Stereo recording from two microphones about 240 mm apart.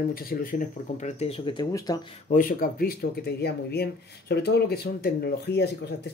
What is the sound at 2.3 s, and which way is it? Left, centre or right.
Speech, left.